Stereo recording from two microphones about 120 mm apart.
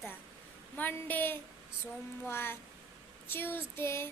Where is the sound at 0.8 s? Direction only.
15° left (ahead or behind).